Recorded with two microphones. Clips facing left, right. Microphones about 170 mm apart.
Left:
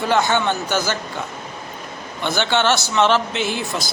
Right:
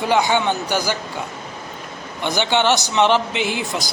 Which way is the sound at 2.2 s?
15° right (ahead or behind).